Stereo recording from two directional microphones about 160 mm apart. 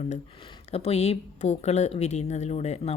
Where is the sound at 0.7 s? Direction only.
40° left (ahead or behind).